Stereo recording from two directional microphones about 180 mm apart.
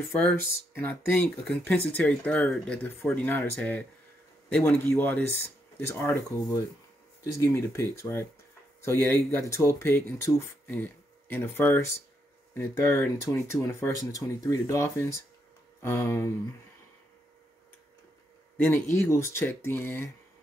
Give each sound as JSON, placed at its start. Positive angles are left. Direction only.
{"t": 0.7, "sound": "speech", "side_deg": 10}
{"t": 19.0, "sound": "speech", "side_deg": 15}